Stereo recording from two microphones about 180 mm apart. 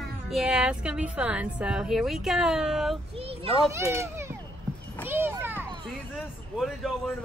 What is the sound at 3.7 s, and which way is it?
Speech, 15° right (ahead or behind).